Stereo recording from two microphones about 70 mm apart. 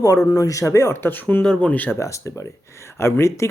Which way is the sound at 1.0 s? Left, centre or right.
Left.